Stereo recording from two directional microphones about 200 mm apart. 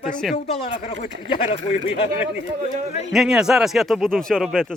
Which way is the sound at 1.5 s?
30° left (ahead or behind).